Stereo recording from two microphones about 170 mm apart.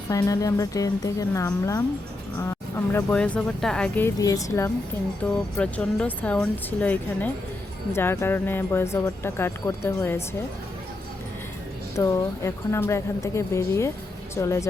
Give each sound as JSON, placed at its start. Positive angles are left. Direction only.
{"t": 0.1, "sound": "speech", "side_deg": 20}
{"t": 3.1, "sound": "speech", "side_deg": 5}
{"t": 5.2, "sound": "speech", "side_deg": 5}
{"t": 11.9, "sound": "speech", "side_deg": 15}